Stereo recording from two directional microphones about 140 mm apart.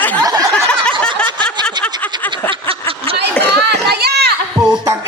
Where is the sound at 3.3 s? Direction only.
10° left (ahead or behind).